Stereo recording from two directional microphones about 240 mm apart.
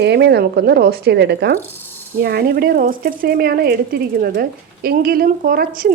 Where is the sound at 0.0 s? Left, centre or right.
Right.